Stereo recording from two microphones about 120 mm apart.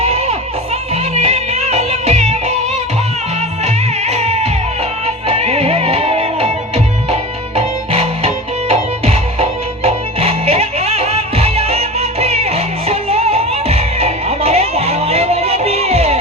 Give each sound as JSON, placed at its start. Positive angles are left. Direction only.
{"t": 0.0, "sound": "music", "side_deg": -60}
{"t": 3.6, "sound": "music", "side_deg": -65}